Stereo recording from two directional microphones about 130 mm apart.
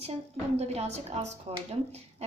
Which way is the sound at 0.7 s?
55° right (ahead or behind).